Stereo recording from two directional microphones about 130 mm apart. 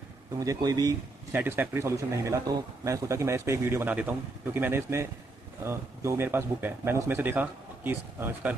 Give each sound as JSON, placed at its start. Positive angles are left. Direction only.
{"t": 0.3, "sound": "speech", "side_deg": -30}
{"t": 1.3, "sound": "speech", "side_deg": -15}